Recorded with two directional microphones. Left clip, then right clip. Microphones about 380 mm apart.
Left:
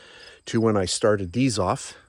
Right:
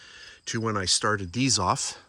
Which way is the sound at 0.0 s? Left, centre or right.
Centre.